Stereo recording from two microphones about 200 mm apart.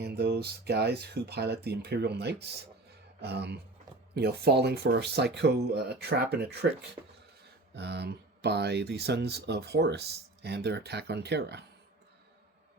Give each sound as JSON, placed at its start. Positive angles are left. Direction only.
{"t": 0.0, "sound": "speech", "side_deg": -55}
{"t": 7.7, "sound": "speech", "side_deg": -55}